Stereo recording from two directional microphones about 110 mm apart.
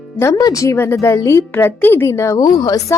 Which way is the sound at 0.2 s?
30° left (ahead or behind).